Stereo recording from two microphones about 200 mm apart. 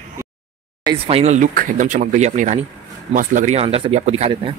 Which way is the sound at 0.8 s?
30° right (ahead or behind).